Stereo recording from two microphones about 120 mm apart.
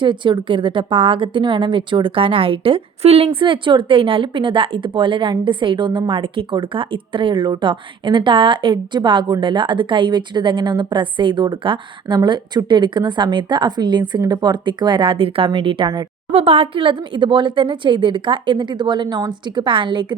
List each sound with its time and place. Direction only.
0.0 s a woman's voice: 40° right (ahead or behind)
3.3 s a woman's voice: 45° right (ahead or behind)